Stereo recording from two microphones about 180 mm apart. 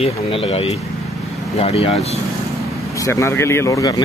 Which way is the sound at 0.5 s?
35° left (ahead or behind).